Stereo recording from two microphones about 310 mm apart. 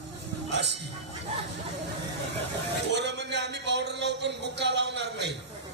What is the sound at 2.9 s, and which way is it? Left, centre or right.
Speech, right.